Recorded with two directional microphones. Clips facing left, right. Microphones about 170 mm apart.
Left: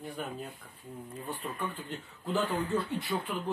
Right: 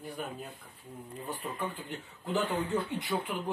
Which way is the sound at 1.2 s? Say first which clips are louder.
Right 1 dB; 15° right (ahead or behind).